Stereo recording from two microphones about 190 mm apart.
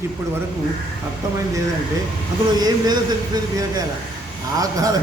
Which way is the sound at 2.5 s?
20° right (ahead or behind).